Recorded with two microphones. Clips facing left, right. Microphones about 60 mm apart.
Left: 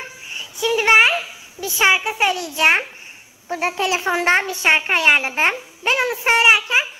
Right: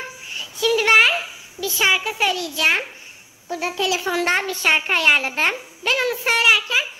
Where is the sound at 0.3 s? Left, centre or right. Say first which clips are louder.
Right 1 dB; left.